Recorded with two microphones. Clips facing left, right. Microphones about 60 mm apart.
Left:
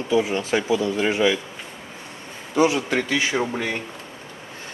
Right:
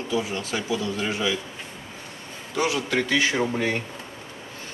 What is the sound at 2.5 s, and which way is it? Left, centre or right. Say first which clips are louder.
Speech: left 4 dB; left.